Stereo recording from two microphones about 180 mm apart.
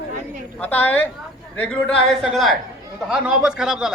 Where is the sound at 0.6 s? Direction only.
10° left (ahead or behind).